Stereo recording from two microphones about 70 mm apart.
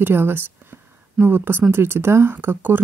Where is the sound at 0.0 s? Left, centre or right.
Right.